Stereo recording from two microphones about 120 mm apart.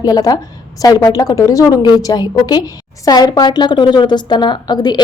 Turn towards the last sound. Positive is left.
turn(degrees=35)  # may be behind; listen again after turning